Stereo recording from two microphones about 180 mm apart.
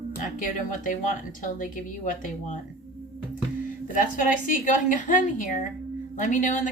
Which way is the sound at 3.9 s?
50° left (ahead or behind).